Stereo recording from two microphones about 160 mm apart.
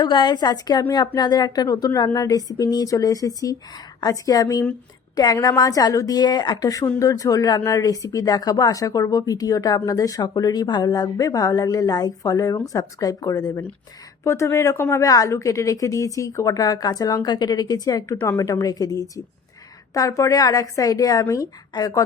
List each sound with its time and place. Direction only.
0.0 s a woman's voice: 30° left (ahead or behind)